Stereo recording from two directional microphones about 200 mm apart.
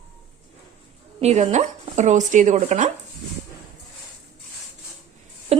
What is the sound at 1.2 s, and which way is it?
A woman's voice, 35° right (ahead or behind).